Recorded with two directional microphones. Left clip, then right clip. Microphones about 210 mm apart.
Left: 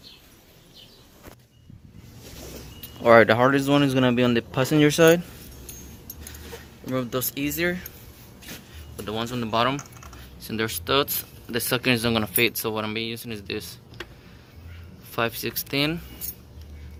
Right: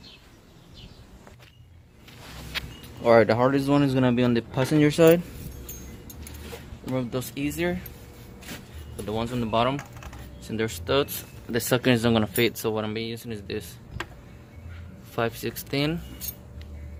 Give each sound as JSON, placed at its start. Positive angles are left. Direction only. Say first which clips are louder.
{"t": 3.0, "sound": "speech", "louder": "left 3 dB", "side_deg": 10}
{"t": 6.9, "sound": "speech", "louder": "left 2 dB", "side_deg": 5}
{"t": 9.0, "sound": "speech", "louder": "even", "side_deg": 0}
{"t": 11.5, "sound": "speech", "louder": "even", "side_deg": -15}
{"t": 15.1, "sound": "speech", "louder": "left 2 dB", "side_deg": 0}